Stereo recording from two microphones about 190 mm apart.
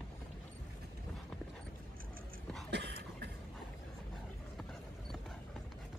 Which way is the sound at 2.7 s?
60° right (ahead or behind).